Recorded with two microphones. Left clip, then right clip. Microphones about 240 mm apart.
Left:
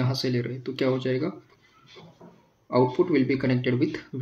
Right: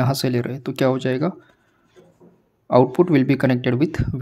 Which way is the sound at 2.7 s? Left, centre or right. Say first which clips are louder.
Right 7 dB; right.